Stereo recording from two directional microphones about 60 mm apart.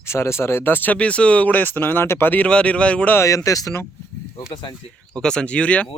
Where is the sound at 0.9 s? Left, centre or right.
Centre; by 2.3 s left.